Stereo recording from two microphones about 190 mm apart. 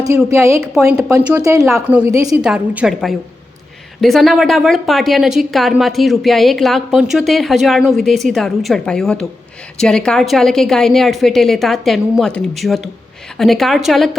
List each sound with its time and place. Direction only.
0.0 s a woman's voice: 15° right (ahead or behind)
1.5 s a woman's voice: centre (ahead or behind)